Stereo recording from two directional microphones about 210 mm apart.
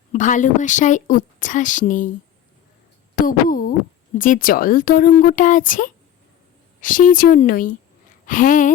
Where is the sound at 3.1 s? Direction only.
40° left (ahead or behind).